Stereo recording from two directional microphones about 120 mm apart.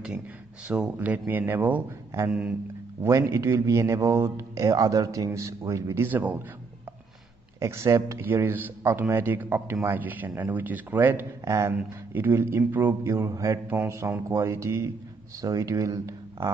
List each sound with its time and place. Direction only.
0.7 s a man's voice: 10° right (ahead or behind)
7.6 s a man's voice: 20° right (ahead or behind)